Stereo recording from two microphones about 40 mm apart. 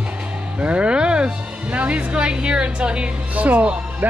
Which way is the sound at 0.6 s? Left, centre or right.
Right.